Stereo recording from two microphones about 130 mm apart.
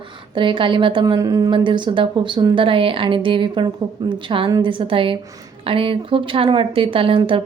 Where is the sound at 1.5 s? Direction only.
40° right (ahead or behind).